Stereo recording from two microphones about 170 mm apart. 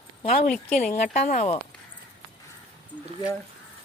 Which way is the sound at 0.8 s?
45° left (ahead or behind).